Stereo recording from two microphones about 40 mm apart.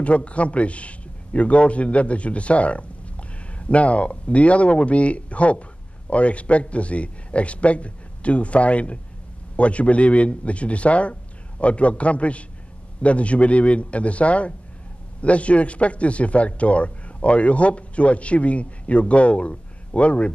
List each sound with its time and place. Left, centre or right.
0.0 s a man's voice: left